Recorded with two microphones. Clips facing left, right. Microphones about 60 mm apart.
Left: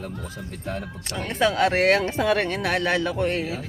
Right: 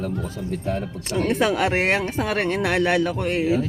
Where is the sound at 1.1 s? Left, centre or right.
Right.